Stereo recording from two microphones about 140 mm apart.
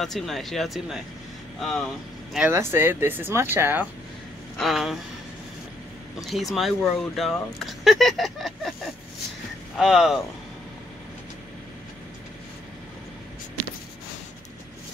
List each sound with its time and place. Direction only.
0.0 s speech: centre (ahead or behind)
2.5 s speech: 15° right (ahead or behind)
4.6 s speech: centre (ahead or behind)
6.2 s speech: centre (ahead or behind)
9.8 s speech: centre (ahead or behind)